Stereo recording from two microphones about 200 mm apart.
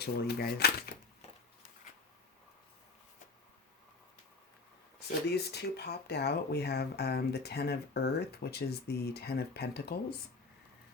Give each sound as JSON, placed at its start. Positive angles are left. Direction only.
{"t": 0.0, "sound": "speech", "side_deg": 50}
{"t": 4.9, "sound": "speech", "side_deg": 55}